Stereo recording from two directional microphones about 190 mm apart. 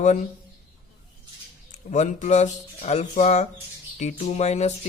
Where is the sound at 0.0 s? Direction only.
40° left (ahead or behind).